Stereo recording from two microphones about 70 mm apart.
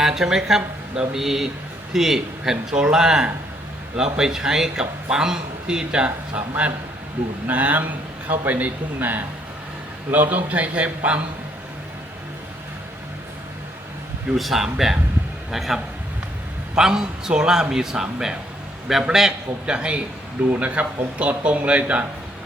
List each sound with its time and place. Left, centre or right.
0.0 s a man's voice: centre
7.4 s a man's voice: right
14.3 s a man's voice: centre